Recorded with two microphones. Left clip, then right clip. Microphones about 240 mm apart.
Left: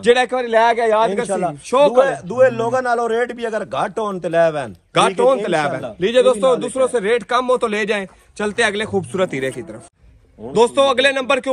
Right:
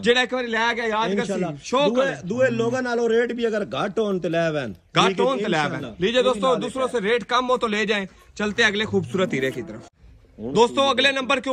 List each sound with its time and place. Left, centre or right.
0.0 s a man's voice: centre
2.0 s a man's voice: centre
5.2 s a man's voice: centre
10.5 s a man's voice: centre